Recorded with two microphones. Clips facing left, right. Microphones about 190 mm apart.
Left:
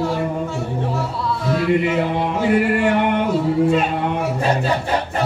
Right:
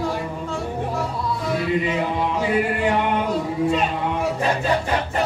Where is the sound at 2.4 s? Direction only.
60° left (ahead or behind).